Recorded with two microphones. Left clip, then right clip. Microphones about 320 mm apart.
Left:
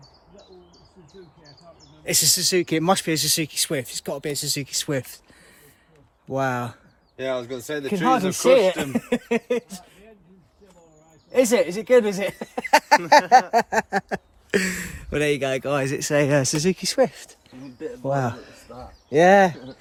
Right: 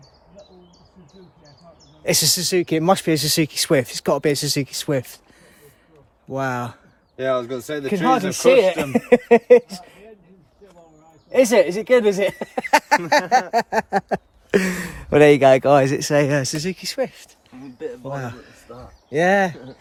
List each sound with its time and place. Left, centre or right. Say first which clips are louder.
2.0 s speech: right 2 dB; centre
6.2 s speech: even; centre
7.2 s speech: right 5 dB; right
7.9 s speech: right 2 dB; centre
11.3 s speech: right 4 dB; centre